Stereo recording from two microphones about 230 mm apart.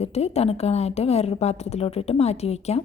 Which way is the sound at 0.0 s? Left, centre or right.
Left.